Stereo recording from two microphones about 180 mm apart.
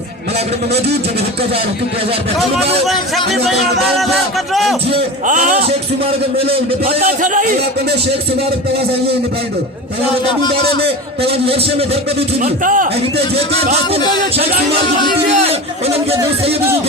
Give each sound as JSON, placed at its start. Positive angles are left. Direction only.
{"t": 2.8, "sound": "music", "side_deg": 0}
{"t": 5.2, "sound": "a man's voice", "side_deg": -45}
{"t": 7.0, "sound": "speech", "side_deg": -50}
{"t": 11.4, "sound": "a man's voice", "side_deg": -30}
{"t": 12.4, "sound": "speech", "side_deg": -45}
{"t": 15.4, "sound": "a sound", "side_deg": -35}